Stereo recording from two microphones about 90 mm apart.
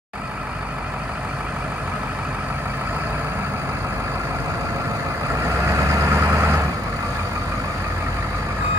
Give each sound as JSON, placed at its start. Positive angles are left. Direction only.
{"t": 5.7, "sound": "vehicle", "side_deg": -35}